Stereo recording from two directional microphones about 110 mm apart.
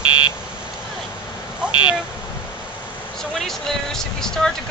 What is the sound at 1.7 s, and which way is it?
Speech, 45° left (ahead or behind).